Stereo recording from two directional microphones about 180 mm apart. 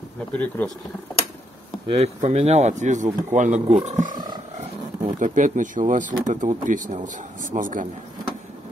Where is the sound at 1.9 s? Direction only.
40° right (ahead or behind).